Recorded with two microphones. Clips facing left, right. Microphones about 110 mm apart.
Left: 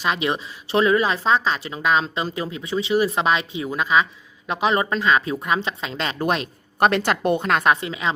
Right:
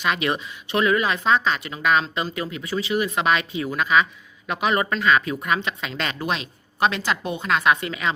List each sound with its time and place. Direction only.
0.0 s speech: 25° left (ahead or behind)
6.1 s a woman's voice: 45° left (ahead or behind)
7.8 s speech: 25° left (ahead or behind)